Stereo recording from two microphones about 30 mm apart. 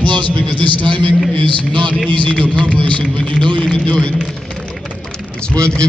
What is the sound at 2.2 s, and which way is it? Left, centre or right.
Speech, left.